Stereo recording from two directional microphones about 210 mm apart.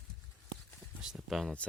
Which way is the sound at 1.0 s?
5° right (ahead or behind).